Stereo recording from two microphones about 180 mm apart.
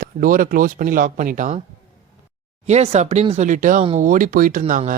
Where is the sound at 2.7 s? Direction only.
40° right (ahead or behind).